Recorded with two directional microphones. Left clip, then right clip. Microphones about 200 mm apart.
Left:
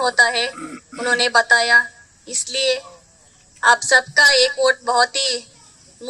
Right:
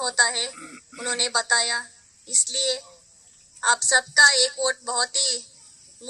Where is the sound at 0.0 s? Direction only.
30° left (ahead or behind).